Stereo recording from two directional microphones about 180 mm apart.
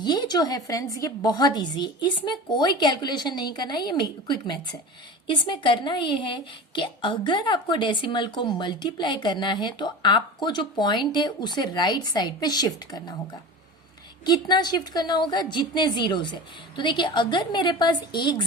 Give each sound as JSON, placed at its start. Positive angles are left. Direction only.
{"t": 0.0, "sound": "a woman's voice", "side_deg": 25}
{"t": 14.3, "sound": "a woman's voice", "side_deg": 25}